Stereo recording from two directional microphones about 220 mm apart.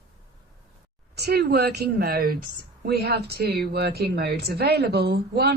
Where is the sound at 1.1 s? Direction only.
50° right (ahead or behind).